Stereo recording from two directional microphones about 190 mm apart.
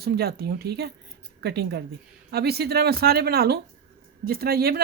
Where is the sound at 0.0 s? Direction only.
55° right (ahead or behind).